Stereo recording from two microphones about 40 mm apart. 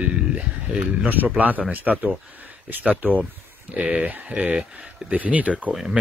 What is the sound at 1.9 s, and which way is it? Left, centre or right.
Speech, centre.